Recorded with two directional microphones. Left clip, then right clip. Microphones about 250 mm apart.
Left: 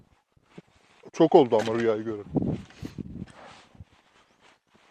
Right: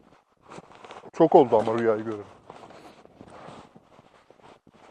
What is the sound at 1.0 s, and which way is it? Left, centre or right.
Speech, left.